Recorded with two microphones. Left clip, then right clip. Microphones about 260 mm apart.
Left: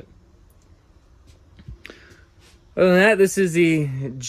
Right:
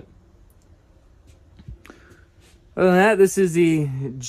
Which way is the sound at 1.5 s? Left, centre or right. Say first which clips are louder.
Left 4 dB; centre.